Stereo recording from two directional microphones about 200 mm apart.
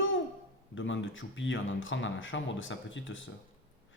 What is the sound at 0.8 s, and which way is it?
Speech, 70° left (ahead or behind).